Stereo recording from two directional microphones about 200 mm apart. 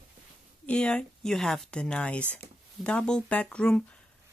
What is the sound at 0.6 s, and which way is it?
Speech, 5° left (ahead or behind).